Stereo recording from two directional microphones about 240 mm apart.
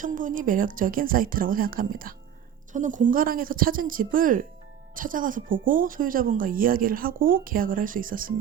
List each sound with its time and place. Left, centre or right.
0.0 s speech: right